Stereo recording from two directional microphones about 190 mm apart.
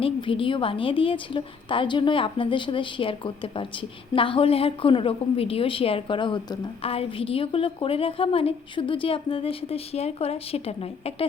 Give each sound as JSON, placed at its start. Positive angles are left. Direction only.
{"t": 0.0, "sound": "a woman's voice", "side_deg": 30}